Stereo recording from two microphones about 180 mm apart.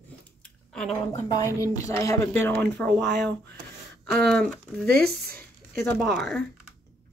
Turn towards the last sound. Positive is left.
turn(degrees=0)  # may be behind; listen again after turning